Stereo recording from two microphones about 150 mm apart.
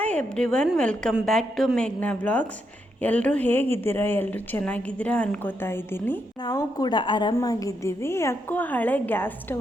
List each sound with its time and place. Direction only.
0.0 s a woman's voice: 10° left (ahead or behind); by 7.3 s 30° left (ahead or behind)
7.3 s a woman's voice: 20° left (ahead or behind)